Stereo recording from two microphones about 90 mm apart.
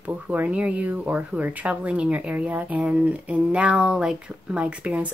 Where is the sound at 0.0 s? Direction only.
15° right (ahead or behind).